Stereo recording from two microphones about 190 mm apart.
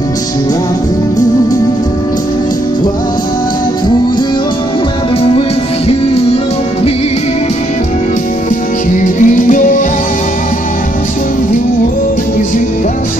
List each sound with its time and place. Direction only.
9.0 s music: 45° left (ahead or behind)